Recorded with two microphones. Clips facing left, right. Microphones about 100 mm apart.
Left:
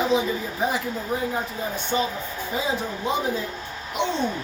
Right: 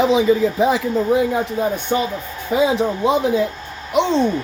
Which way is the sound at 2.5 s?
85° right.